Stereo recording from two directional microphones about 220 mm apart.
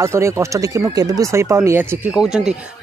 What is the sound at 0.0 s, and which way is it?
Speech, 10° right (ahead or behind).